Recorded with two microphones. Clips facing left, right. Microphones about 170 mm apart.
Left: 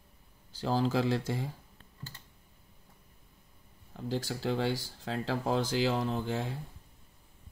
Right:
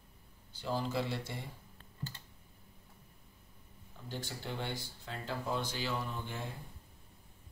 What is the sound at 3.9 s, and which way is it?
Speech, 90° left.